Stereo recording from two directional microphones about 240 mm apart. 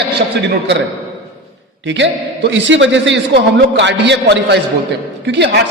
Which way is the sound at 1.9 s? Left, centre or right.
Right.